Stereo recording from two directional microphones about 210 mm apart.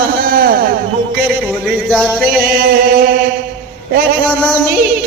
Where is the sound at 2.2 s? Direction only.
45° right (ahead or behind).